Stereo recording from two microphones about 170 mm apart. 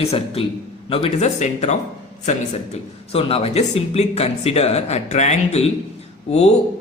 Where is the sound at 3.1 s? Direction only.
35° left (ahead or behind).